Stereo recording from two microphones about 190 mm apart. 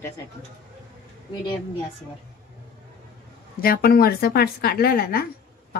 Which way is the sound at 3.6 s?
55° left (ahead or behind).